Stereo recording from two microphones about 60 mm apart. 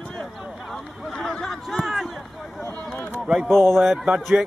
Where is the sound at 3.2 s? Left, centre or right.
Centre.